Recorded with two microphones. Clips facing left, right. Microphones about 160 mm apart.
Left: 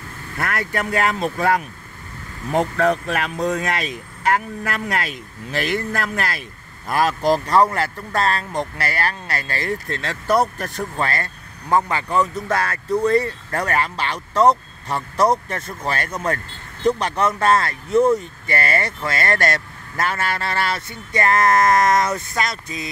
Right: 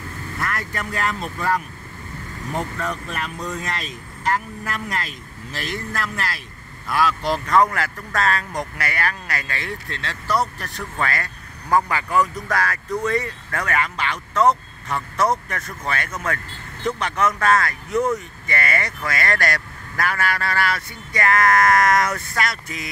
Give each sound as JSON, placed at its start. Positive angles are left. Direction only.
{"t": 0.4, "sound": "speech", "side_deg": 65}
{"t": 11.0, "sound": "speech", "side_deg": 30}